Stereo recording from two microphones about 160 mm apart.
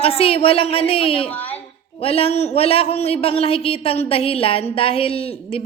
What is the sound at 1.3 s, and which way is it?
Speech, 10° left (ahead or behind).